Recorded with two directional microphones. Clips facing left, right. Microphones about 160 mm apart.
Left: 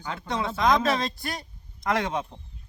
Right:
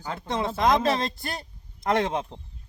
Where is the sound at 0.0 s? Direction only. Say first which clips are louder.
Right 1 dB; 35° right (ahead or behind).